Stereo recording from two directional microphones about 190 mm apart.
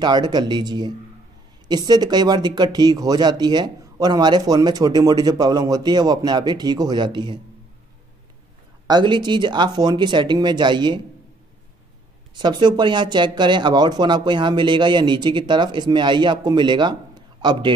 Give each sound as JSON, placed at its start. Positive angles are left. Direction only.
{"t": 0.0, "sound": "speech", "side_deg": -25}
{"t": 8.8, "sound": "speech", "side_deg": -25}
{"t": 12.4, "sound": "speech", "side_deg": -25}